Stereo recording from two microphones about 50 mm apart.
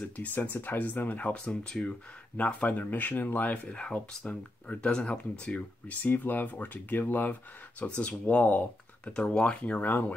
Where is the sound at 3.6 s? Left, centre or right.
Centre.